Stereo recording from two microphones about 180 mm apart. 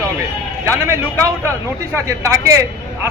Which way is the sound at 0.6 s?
15° right (ahead or behind).